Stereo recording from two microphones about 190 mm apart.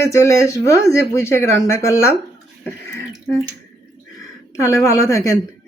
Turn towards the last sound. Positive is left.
turn(degrees=15)  # may be behind; listen again after turning